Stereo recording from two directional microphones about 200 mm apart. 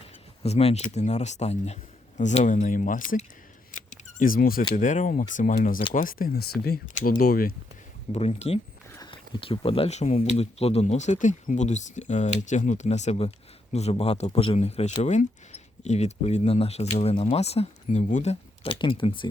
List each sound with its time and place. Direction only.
0.4 s speech: 30° left (ahead or behind)
3.7 s a sound: 40° left (ahead or behind)
4.7 s speech: 40° left (ahead or behind)
8.1 s speech: 30° left (ahead or behind)